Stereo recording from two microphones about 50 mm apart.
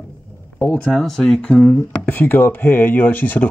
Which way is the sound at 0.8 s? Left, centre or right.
Centre.